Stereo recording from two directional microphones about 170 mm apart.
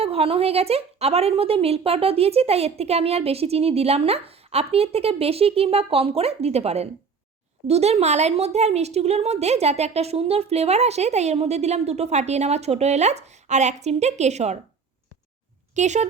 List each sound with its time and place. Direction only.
0.0 s a woman's voice: 35° right (ahead or behind)
15.7 s speech: 45° right (ahead or behind)